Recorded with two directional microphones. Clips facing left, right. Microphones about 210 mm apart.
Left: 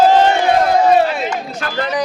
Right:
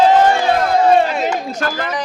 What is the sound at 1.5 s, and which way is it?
Speech, 45° right (ahead or behind).